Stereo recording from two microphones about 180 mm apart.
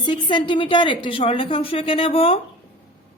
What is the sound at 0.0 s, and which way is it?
A woman's voice, 25° left (ahead or behind).